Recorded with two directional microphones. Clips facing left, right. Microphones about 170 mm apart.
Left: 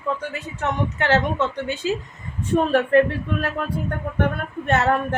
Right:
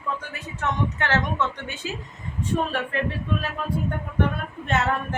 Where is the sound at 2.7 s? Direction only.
55° left (ahead or behind).